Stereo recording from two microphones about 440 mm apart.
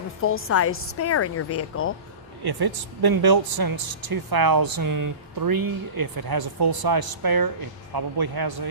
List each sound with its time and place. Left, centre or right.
0.2 s a woman's voice: left
2.4 s speech: right